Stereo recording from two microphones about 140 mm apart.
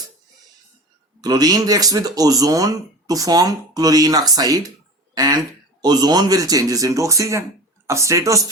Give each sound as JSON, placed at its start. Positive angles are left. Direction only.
{"t": 1.2, "sound": "speech", "side_deg": -25}